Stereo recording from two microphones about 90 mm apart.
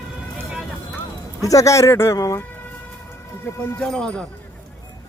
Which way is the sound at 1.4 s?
40° left (ahead or behind).